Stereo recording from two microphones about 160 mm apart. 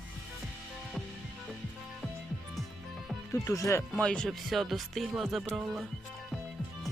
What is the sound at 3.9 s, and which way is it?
Speech, 5° left (ahead or behind).